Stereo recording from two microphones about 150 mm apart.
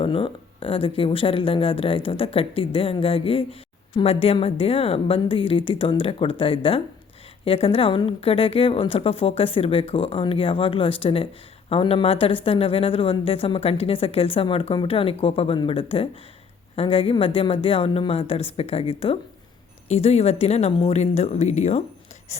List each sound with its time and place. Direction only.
0.0 s speech: 35° left (ahead or behind)
22.3 s whispering: 50° left (ahead or behind)